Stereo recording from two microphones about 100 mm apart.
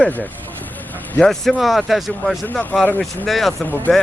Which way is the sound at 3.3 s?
Centre (ahead or behind).